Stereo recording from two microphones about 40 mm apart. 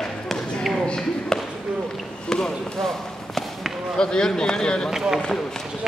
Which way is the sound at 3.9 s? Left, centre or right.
Centre.